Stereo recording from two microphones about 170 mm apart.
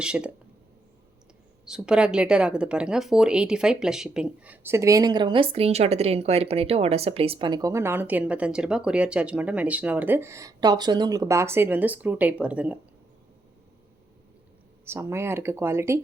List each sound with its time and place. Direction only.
0.0 s speech: 5° right (ahead or behind)
1.6 s speech: 5° right (ahead or behind)
14.8 s speech: 15° right (ahead or behind)